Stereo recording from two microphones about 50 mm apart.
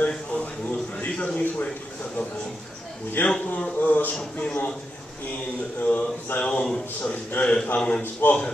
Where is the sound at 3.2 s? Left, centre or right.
Left.